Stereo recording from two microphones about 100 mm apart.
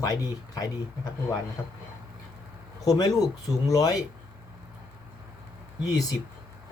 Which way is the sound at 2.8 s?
35° left (ahead or behind).